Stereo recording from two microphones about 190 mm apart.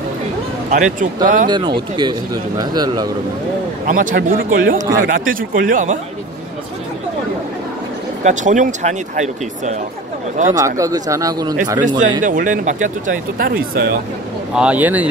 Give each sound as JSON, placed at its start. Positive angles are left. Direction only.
{"t": 0.7, "sound": "speech", "side_deg": -40}
{"t": 2.0, "sound": "speech", "side_deg": -25}
{"t": 3.8, "sound": "speech", "side_deg": -45}
{"t": 8.2, "sound": "speech", "side_deg": -40}
{"t": 10.6, "sound": "speech", "side_deg": -15}
{"t": 12.2, "sound": "speech", "side_deg": -45}
{"t": 14.5, "sound": "speech", "side_deg": -5}